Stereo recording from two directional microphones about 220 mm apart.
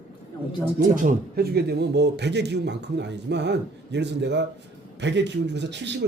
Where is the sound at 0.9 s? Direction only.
40° right (ahead or behind).